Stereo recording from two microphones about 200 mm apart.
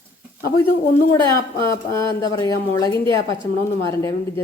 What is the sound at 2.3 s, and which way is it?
A woman's voice, 20° left (ahead or behind).